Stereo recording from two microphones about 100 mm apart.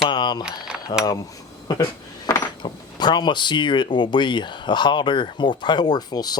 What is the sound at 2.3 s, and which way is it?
Speech, 45° left (ahead or behind).